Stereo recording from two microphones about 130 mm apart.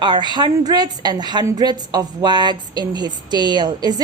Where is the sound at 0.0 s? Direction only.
35° right (ahead or behind).